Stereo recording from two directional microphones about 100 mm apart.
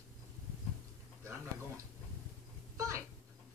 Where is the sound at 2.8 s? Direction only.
30° right (ahead or behind).